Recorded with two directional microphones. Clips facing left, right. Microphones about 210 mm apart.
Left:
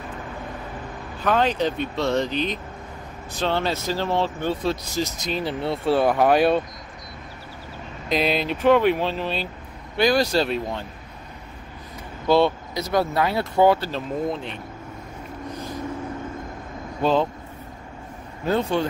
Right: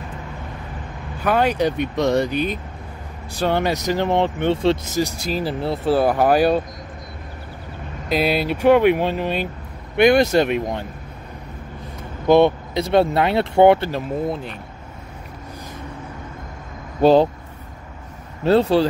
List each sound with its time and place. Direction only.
1.2 s speech: 10° right (ahead or behind)
5.0 s speech: 5° right (ahead or behind)
8.1 s speech: 5° right (ahead or behind)
12.3 s speech: 20° right (ahead or behind)
13.9 s speech: 5° right (ahead or behind)
17.0 s speech: 35° right (ahead or behind)
18.5 s speech: 35° right (ahead or behind)